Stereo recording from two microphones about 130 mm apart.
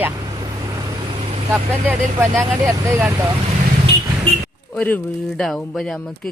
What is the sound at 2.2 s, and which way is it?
Speech, 15° right (ahead or behind).